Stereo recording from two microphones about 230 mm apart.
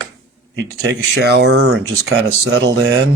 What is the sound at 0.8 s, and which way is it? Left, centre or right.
Speech, right.